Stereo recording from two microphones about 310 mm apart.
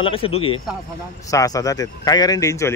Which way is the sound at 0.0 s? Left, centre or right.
Centre.